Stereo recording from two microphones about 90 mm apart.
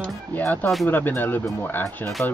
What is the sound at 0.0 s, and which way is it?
Music, 20° left (ahead or behind).